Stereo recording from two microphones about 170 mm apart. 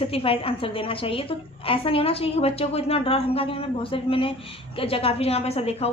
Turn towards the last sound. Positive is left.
turn(degrees=35)  # may be behind; listen again after turning